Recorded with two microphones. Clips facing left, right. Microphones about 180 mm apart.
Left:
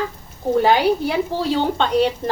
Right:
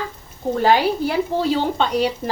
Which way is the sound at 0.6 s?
Centre (ahead or behind).